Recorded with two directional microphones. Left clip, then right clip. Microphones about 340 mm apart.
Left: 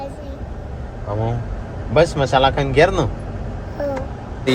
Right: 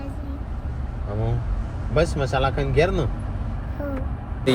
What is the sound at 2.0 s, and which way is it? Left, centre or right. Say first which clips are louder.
Speech: left 7 dB; left.